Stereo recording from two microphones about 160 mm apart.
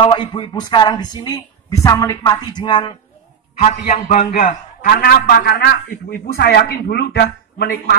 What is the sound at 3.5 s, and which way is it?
A man's voice, 45° left (ahead or behind).